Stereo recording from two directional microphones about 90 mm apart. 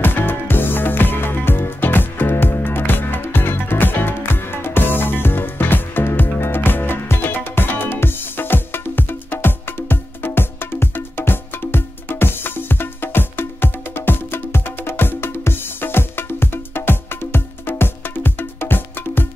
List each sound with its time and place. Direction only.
0.0 s music: 25° left (ahead or behind)